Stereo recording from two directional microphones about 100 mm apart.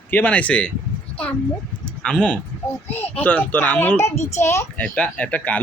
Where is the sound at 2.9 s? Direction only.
20° left (ahead or behind).